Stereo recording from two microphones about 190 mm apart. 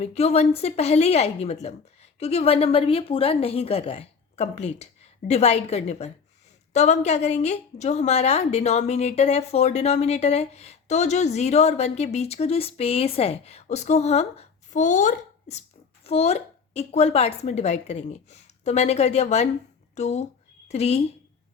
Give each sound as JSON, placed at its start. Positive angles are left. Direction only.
{"t": 0.0, "sound": "a woman's voice", "side_deg": 35}